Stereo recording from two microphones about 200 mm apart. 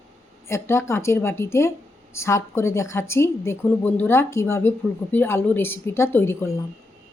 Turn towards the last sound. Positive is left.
turn(degrees=10)  # may be behind; listen again after turning